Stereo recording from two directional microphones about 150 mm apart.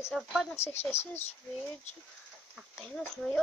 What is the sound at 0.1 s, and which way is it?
Child singing, centre (ahead or behind).